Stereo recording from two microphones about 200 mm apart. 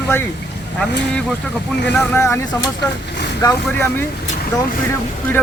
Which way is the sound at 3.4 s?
10° left (ahead or behind).